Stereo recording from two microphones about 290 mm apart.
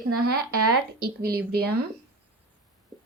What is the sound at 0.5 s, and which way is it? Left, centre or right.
Speech, right.